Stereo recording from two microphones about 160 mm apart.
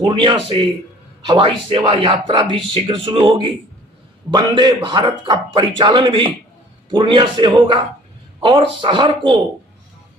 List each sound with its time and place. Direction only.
0.0 s speech: 30° right (ahead or behind)